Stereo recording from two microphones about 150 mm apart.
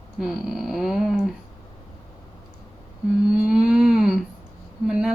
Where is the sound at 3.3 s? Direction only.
5° right (ahead or behind).